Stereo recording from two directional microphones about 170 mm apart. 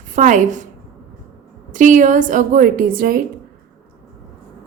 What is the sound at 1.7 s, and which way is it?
A woman's voice, 50° right (ahead or behind).